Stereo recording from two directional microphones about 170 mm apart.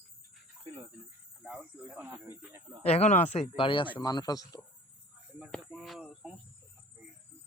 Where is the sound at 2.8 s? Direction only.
40° left (ahead or behind); by 4.6 s 20° left (ahead or behind).